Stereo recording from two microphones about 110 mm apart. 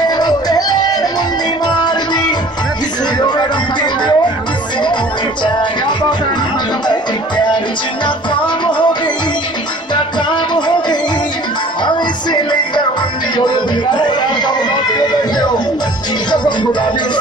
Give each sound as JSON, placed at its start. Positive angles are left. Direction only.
{"t": 0.1, "sound": "music", "side_deg": 40}
{"t": 5.4, "sound": "music", "side_deg": 45}
{"t": 10.3, "sound": "music", "side_deg": 45}
{"t": 13.9, "sound": "chatter", "side_deg": 45}